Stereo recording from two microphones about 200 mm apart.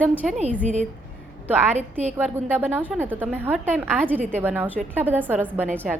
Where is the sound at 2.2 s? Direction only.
10° right (ahead or behind).